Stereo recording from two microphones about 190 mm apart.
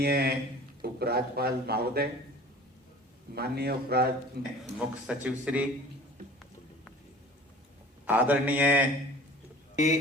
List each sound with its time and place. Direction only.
0.0 s speech: 55° right (ahead or behind)
3.3 s speech: 55° right (ahead or behind)
4.8 s a man's voice: 5° right (ahead or behind)
8.0 s a man's voice: 10° right (ahead or behind)
9.7 s a man's voice: 40° left (ahead or behind)